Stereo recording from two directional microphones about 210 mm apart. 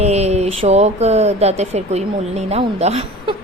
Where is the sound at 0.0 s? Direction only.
30° right (ahead or behind).